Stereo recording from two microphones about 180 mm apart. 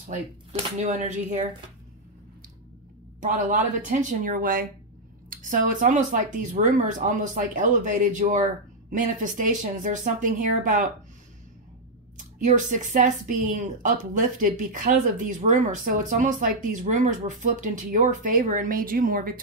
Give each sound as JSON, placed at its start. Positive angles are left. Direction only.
{"t": 0.1, "sound": "speech", "side_deg": -35}
{"t": 3.2, "sound": "a man's voice", "side_deg": -45}
{"t": 12.2, "sound": "speech", "side_deg": -45}